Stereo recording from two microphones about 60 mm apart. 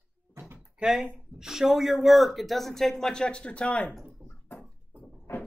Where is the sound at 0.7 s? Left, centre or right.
Centre.